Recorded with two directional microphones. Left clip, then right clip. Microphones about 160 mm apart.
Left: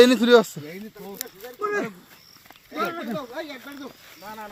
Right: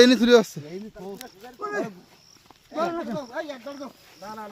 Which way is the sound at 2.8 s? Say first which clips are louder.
Right 1 dB; 35° right (ahead or behind).